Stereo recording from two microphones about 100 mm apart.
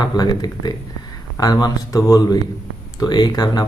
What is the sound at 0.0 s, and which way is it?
Speech, 45° left (ahead or behind).